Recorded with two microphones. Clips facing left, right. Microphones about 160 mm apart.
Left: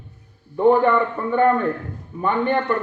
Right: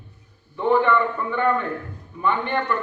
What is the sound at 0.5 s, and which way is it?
Speech, 40° left (ahead or behind).